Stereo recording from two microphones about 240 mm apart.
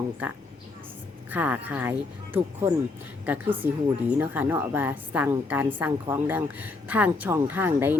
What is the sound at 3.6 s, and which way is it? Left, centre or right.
A woman's voice, centre.